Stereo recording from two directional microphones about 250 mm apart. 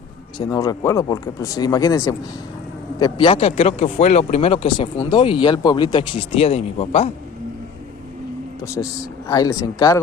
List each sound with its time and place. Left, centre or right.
0.3 s speech: centre
8.6 s speech: centre